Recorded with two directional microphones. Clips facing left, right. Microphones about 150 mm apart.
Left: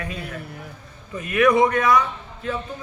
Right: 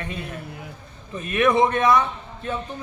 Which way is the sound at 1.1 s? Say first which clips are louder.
Left 2 dB; 25° right (ahead or behind).